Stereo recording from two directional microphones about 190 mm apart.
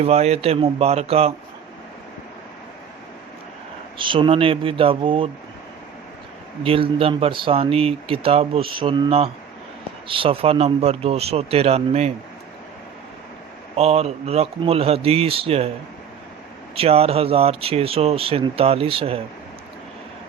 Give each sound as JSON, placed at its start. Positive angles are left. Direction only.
{"t": 0.0, "sound": "speech", "side_deg": -35}
{"t": 3.9, "sound": "speech", "side_deg": -25}
{"t": 6.6, "sound": "speech", "side_deg": -30}
{"t": 13.7, "sound": "speech", "side_deg": -35}
{"t": 16.7, "sound": "speech", "side_deg": -30}